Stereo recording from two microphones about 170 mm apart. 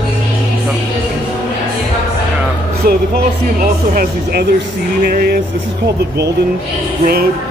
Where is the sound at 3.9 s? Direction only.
60° right (ahead or behind).